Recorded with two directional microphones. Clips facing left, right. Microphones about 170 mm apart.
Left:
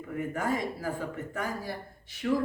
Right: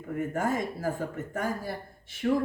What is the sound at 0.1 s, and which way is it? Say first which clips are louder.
Speech: right 2 dB; 50° right (ahead or behind).